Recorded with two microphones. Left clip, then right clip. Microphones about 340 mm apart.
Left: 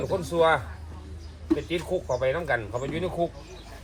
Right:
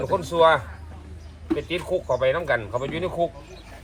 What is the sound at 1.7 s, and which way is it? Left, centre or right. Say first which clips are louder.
Speech: right 3 dB; right.